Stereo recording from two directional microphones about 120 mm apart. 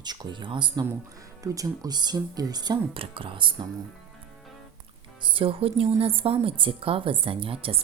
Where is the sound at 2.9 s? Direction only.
50° right (ahead or behind).